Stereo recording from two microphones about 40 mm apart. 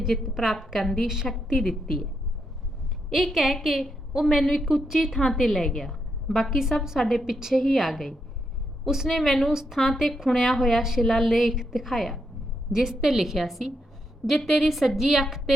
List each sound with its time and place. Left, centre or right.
0.3 s a woman's voice: centre
1.0 s a woman's voice: centre
1.5 s a woman's voice: centre
3.1 s a woman's voice: centre
8.8 s a woman's voice: centre
9.0 s a woman's voice: centre
9.5 s a woman's voice: centre
9.7 s a woman's voice: centre
12.7 s a woman's voice: centre